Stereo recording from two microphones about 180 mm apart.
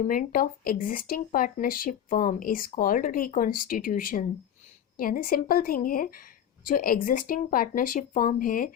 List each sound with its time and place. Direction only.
0.0 s speech: 50° left (ahead or behind)